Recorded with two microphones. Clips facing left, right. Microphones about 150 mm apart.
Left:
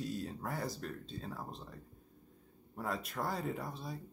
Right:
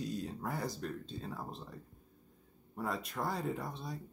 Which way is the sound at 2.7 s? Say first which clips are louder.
Right 1 dB; centre (ahead or behind).